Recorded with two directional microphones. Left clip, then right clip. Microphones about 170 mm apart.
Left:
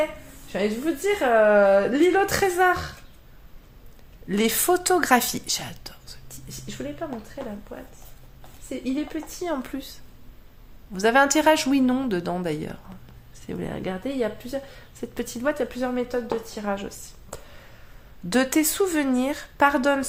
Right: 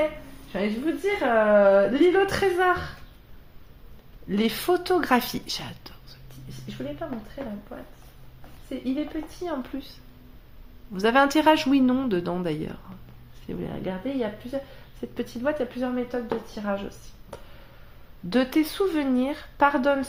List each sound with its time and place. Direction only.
0.5 s a woman's voice: 35° left (ahead or behind)
4.3 s a woman's voice: 35° left (ahead or behind)
6.1 s a sound: 35° left (ahead or behind)
7.7 s a woman's voice: 40° left (ahead or behind)
10.9 s a woman's voice: 20° left (ahead or behind)
13.5 s a woman's voice: 35° left (ahead or behind)
17.3 s a sound: 35° left (ahead or behind)
18.3 s a woman's voice: 35° left (ahead or behind)